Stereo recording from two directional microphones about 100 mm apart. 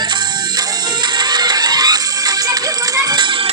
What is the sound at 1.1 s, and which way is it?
Music, 45° right (ahead or behind).